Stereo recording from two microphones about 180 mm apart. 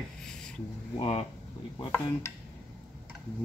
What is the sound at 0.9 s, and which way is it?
Speech, 30° left (ahead or behind).